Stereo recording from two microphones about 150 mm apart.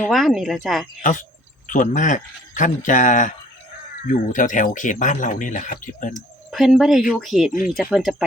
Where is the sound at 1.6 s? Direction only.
55° left (ahead or behind).